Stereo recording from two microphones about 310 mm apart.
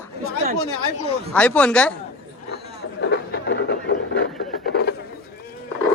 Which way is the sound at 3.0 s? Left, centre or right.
Left.